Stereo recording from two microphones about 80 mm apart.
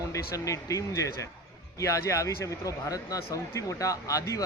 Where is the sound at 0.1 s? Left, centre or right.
Left.